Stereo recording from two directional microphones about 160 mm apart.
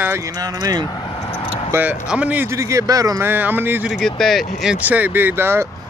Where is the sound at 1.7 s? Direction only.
10° right (ahead or behind).